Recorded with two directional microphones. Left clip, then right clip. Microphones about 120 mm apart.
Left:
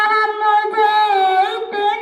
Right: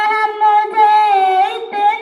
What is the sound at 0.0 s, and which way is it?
Music, 25° right (ahead or behind).